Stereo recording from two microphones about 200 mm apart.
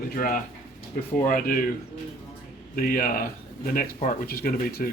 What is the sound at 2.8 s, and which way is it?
Speech, 45° left (ahead or behind).